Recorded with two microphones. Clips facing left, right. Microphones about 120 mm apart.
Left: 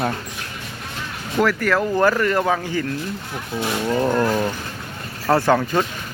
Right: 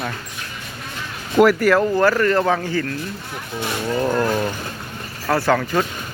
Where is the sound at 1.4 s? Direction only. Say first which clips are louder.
Right 6 dB; 15° right (ahead or behind).